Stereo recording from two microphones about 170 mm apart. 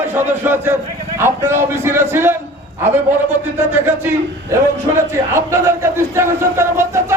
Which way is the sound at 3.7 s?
15° right (ahead or behind).